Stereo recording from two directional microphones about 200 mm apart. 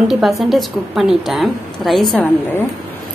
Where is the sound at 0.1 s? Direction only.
Centre (ahead or behind).